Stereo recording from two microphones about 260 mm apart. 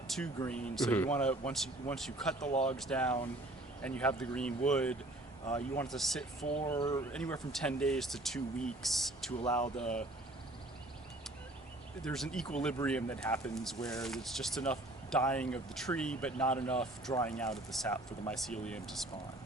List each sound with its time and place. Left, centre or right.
0.3 s speech: centre
2.4 s speech: left
2.6 s speech: centre
6.4 s speech: left
6.7 s speech: centre
7.1 s speech: centre
9.4 s speech: centre
12.0 s speech: centre